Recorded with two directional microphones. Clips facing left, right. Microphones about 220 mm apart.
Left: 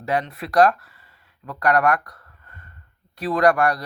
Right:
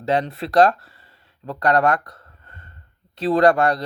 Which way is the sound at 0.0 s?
25° right (ahead or behind).